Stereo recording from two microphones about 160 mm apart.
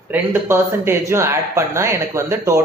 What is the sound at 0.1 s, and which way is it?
Speech, 15° right (ahead or behind).